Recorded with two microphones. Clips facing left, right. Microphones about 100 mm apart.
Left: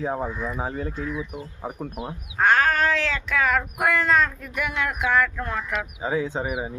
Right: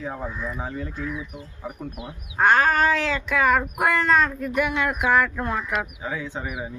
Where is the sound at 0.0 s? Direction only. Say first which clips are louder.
Left 5 dB; 30° left (ahead or behind).